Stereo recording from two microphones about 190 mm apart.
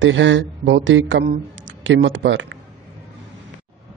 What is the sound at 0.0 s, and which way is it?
Speech, 80° right.